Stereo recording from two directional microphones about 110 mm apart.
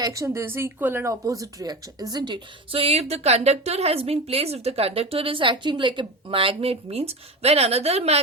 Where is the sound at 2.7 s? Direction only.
65° right (ahead or behind).